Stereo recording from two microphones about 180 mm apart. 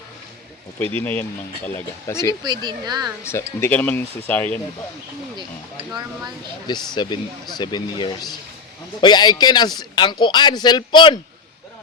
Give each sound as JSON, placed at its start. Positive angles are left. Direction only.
{"t": 0.8, "sound": "speech", "side_deg": 10}
{"t": 2.4, "sound": "speech", "side_deg": -25}
{"t": 3.2, "sound": "speech", "side_deg": 15}
{"t": 6.7, "sound": "speech", "side_deg": 25}